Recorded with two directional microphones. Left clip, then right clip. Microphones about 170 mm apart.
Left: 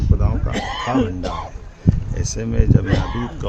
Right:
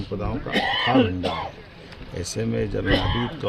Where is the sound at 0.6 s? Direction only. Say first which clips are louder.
Right 2 dB; 35° right (ahead or behind).